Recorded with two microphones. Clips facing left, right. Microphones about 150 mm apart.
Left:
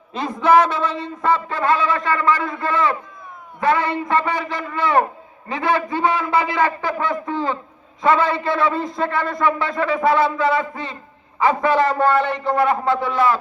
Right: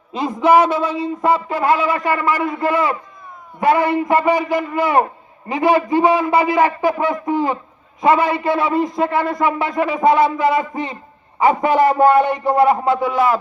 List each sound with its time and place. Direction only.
0.1 s a man's voice: 10° right (ahead or behind)